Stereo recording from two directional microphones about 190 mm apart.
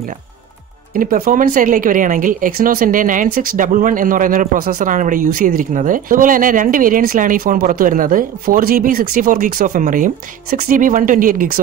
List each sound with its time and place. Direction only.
0.9 s a woman's voice: 50° right (ahead or behind)